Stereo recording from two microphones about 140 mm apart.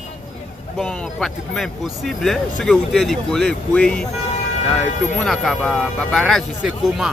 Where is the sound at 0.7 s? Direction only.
5° left (ahead or behind).